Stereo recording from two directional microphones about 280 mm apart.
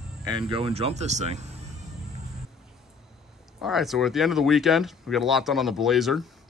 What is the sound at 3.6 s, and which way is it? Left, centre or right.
Speech, centre.